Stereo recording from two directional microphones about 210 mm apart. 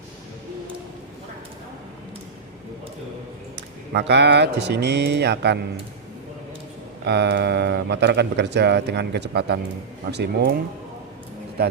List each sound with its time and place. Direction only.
3.9 s speech: 55° right (ahead or behind)
7.0 s speech: 50° right (ahead or behind)